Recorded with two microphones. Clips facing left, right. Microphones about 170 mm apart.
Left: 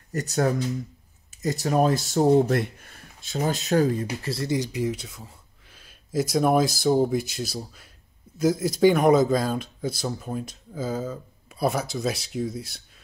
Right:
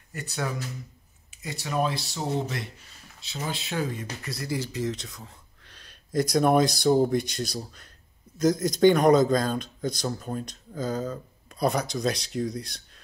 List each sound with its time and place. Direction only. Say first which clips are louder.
0.1 s speech: left 8 dB; 40° left (ahead or behind); by 12.8 s 5° left (ahead or behind)